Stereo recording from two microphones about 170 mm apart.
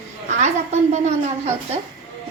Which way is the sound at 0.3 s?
45° right (ahead or behind).